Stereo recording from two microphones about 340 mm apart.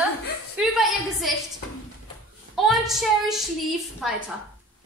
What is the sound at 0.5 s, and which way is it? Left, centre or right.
Speech, centre.